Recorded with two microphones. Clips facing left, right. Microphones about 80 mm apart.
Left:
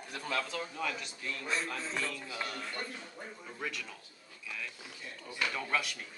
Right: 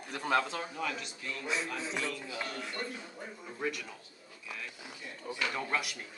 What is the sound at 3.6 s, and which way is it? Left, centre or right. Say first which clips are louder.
Speech: right 4 dB; centre.